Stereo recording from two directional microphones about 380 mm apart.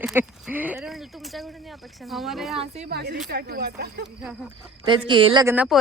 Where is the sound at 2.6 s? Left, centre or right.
Right.